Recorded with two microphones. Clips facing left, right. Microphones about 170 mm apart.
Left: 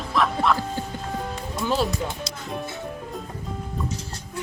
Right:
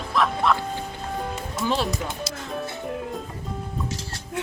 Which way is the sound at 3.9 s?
80° right.